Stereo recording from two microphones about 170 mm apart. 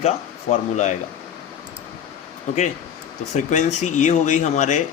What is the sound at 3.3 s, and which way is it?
Speech, 45° left (ahead or behind).